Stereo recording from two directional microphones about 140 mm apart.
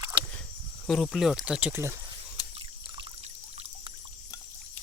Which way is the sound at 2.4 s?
25° left (ahead or behind).